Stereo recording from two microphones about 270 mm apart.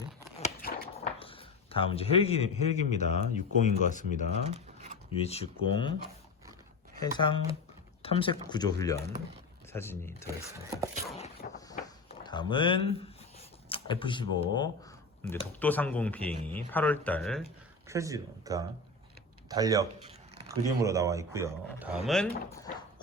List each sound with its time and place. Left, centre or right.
0.3 s a sound: left
1.2 s a man's voice: centre
4.3 s a sound: right
5.1 s speech: left
7.0 s speech: centre
10.2 s speech: centre
11.7 s a sound: centre
13.7 s speech: centre
15.6 s speech: centre
17.8 s speech: centre
19.5 s a sound: centre
20.5 s speech: centre